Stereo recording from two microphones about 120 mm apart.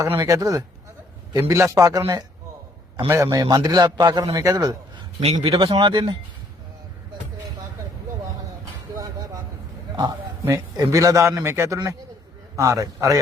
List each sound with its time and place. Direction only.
0.0 s a man's voice: 25° right (ahead or behind)
5.2 s speech: 55° right (ahead or behind)
9.0 s vehicle: 30° right (ahead or behind)
10.4 s a man's voice: 30° right (ahead or behind)